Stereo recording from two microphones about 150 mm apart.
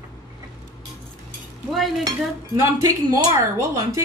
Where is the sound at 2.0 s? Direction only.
20° right (ahead or behind).